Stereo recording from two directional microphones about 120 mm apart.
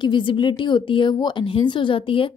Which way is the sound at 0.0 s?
45° left (ahead or behind).